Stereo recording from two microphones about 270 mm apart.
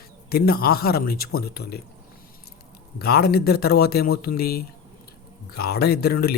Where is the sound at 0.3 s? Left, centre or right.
Left.